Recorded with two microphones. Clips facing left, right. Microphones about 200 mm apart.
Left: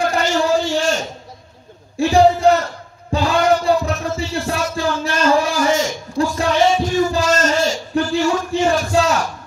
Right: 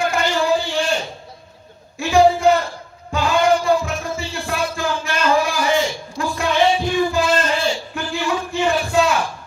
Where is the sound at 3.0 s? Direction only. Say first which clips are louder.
Left 1 dB; 35° left (ahead or behind).